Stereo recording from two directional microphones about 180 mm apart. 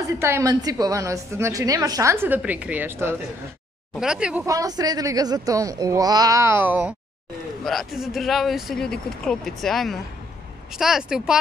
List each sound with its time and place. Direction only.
0.2 s a woman's voice: 15° right (ahead or behind)
4.5 s speech: 20° right (ahead or behind); by 11.3 s 5° right (ahead or behind)